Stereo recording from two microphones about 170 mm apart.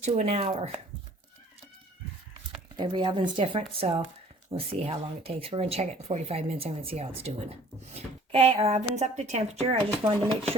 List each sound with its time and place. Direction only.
0.0 s speech: 40° right (ahead or behind)
2.7 s speech: 25° right (ahead or behind)